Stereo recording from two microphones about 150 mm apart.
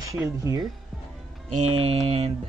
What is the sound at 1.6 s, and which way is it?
Speech, 45° right (ahead or behind).